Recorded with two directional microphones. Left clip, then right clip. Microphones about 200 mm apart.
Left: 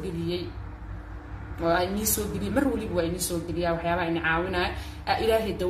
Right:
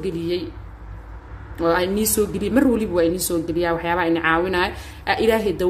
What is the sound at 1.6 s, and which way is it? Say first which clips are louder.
A woman's voice: right 6 dB; 45° right (ahead or behind).